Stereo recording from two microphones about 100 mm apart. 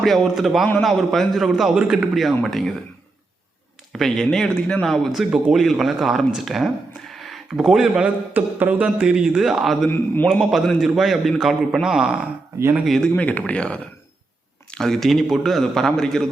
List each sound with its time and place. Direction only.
0.0 s a man's voice: centre (ahead or behind)
3.9 s a man's voice: 5° left (ahead or behind)
8.3 s a man's voice: 20° right (ahead or behind); by 13.1 s centre (ahead or behind)
13.1 s a man's voice: 15° left (ahead or behind)